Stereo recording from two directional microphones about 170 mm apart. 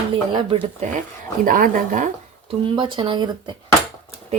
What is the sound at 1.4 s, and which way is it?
Speech, 55° right (ahead or behind).